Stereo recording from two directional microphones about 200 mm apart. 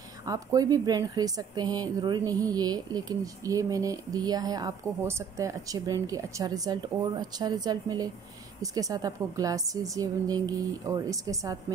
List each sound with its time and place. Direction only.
0.2 s a woman's voice: 20° right (ahead or behind)